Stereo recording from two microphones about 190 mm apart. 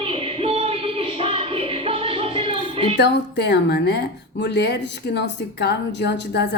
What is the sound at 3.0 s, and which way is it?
A woman's voice, 65° left (ahead or behind).